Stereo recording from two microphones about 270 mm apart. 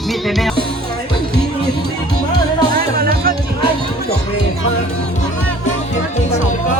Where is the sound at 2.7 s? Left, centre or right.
Right.